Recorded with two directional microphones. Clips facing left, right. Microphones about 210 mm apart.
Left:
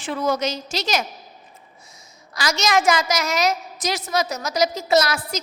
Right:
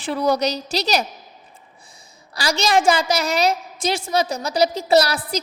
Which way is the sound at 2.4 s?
30° right (ahead or behind).